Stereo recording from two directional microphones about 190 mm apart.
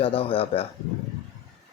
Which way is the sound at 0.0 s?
30° left (ahead or behind).